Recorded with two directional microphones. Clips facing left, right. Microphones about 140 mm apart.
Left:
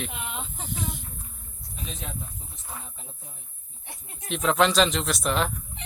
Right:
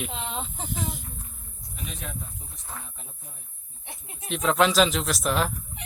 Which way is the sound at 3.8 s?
20° right (ahead or behind).